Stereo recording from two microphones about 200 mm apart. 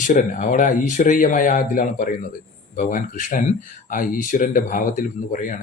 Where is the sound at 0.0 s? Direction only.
45° left (ahead or behind).